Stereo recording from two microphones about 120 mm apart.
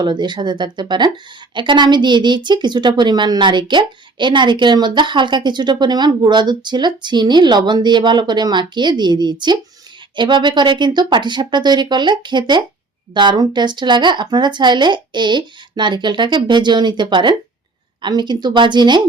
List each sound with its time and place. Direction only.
0.0 s a woman's voice: 40° right (ahead or behind)